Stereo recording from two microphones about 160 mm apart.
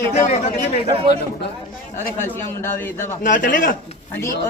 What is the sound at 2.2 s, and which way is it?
Speech, 15° left (ahead or behind).